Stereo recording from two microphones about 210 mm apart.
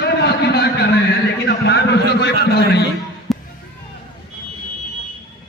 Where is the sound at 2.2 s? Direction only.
50° left (ahead or behind).